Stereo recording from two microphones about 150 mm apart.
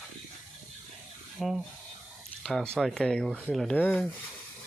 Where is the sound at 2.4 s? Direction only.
5° left (ahead or behind).